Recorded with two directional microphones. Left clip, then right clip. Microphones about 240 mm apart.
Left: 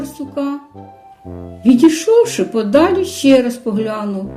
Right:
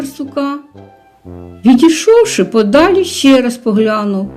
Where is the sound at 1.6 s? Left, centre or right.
Right.